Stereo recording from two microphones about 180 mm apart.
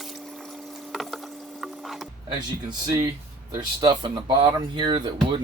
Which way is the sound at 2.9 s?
20° right (ahead or behind).